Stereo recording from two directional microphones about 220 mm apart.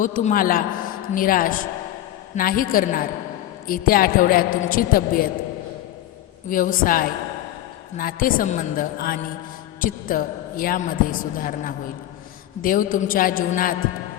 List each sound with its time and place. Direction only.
0.0 s a man's voice: 35° left (ahead or behind)
6.5 s a man's voice: 40° left (ahead or behind)